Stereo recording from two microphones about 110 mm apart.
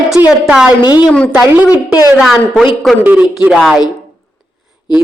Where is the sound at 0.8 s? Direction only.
40° left (ahead or behind).